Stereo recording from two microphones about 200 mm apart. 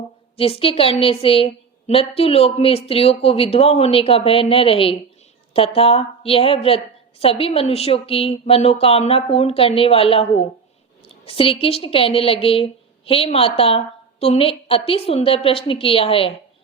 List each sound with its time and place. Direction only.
0.3 s a woman's voice: 30° left (ahead or behind)